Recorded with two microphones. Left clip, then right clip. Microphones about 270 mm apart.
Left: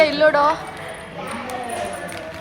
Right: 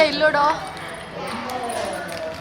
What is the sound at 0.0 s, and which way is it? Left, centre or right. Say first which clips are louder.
Speech: left 2 dB; centre.